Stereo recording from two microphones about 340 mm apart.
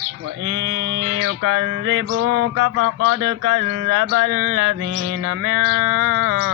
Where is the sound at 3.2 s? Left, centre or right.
Right.